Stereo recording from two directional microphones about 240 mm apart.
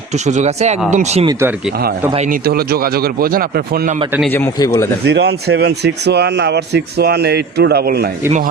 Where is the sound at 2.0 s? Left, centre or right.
Right.